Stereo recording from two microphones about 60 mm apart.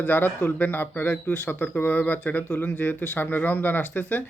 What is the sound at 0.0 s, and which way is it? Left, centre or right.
A man's voice, left.